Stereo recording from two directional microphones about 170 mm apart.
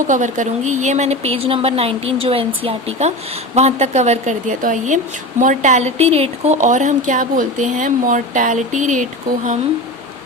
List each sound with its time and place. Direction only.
0.1 s speech: 45° right (ahead or behind)